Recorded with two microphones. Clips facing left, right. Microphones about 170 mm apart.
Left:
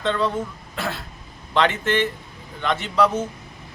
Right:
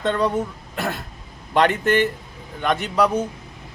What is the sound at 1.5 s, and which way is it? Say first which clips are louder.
Speech: right 3 dB; 45° right (ahead or behind).